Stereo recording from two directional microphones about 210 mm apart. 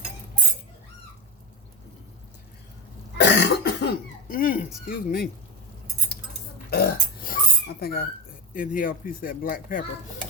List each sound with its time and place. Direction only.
3.2 s cough: 55° left (ahead or behind)
6.7 s pig: 45° left (ahead or behind)
8.5 s speech: 40° left (ahead or behind)